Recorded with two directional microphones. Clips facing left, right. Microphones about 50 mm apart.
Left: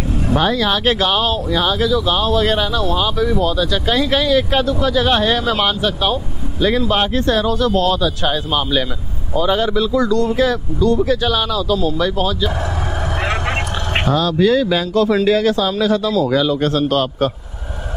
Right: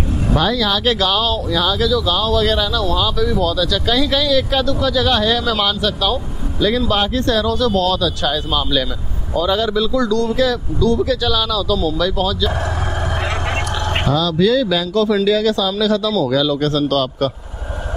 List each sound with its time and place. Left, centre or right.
0.4 s speech: left
13.2 s vehicle: centre
14.3 s speech: left